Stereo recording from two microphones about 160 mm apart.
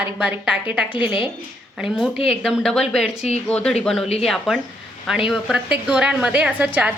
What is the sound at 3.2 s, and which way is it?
Speech, 45° left (ahead or behind).